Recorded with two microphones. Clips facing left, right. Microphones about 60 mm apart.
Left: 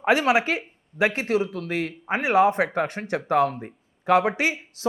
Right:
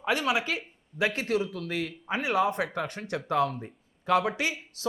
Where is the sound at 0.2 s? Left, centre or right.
Left.